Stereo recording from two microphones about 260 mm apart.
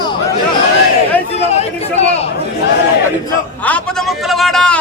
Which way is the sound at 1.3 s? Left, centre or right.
Left.